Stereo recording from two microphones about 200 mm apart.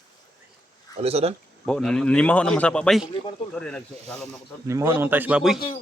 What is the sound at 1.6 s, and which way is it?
A man's voice, 5° left (ahead or behind).